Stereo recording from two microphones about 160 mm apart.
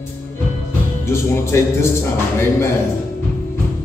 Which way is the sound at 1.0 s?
15° left (ahead or behind).